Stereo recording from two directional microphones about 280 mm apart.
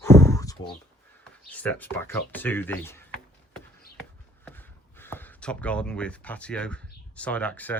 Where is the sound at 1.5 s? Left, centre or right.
Centre.